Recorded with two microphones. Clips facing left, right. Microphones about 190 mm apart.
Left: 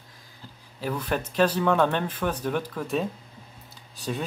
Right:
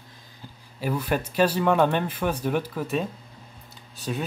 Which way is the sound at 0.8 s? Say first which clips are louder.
Right 2 dB; 10° right (ahead or behind).